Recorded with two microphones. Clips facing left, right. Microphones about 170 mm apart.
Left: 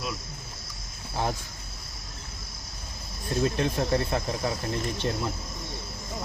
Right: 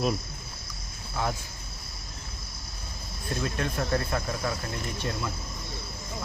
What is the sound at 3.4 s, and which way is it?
Speech, 25° left (ahead or behind).